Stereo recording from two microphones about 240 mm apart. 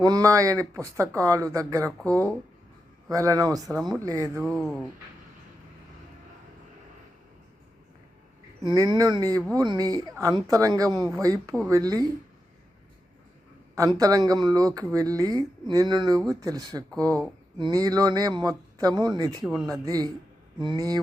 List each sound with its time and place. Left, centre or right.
0.0 s speech: centre
4.4 s speech: centre
8.7 s speech: centre
13.7 s speech: centre